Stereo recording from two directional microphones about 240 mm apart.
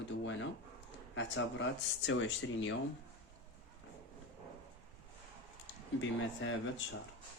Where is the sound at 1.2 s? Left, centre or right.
Left.